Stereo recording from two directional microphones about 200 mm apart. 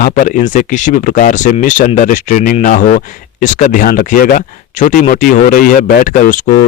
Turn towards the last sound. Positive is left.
turn(degrees=40)  # may be behind; listen again after turning